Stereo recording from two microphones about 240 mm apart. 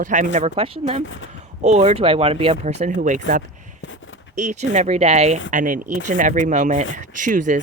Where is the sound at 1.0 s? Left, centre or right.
Left.